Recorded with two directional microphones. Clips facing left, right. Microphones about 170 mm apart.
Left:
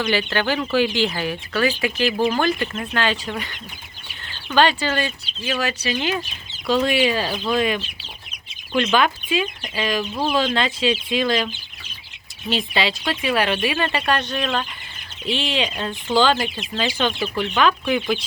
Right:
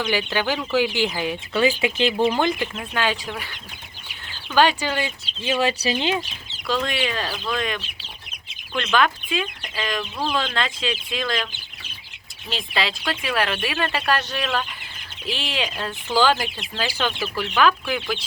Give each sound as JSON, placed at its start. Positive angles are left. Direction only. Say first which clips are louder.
{"t": 0.1, "sound": "speech", "louder": "left 2 dB", "side_deg": -10}
{"t": 2.6, "sound": "speech", "louder": "left 2 dB", "side_deg": -5}
{"t": 6.8, "sound": "speech", "louder": "left 6 dB", "side_deg": 5}
{"t": 7.3, "sound": "speech", "louder": "left 4 dB", "side_deg": 20}
{"t": 8.7, "sound": "speech", "louder": "left 2 dB", "side_deg": 5}
{"t": 12.5, "sound": "speech", "louder": "left 4 dB", "side_deg": 0}